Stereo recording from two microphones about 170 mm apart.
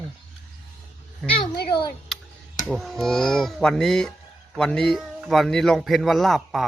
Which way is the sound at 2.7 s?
Centre (ahead or behind).